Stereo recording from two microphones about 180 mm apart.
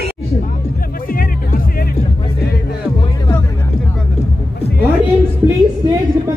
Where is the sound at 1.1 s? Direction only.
50° left (ahead or behind).